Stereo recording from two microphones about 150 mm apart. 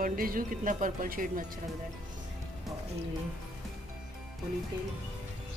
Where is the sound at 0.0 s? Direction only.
70° right (ahead or behind).